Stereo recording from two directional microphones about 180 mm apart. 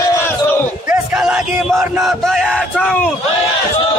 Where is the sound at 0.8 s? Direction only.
5° right (ahead or behind).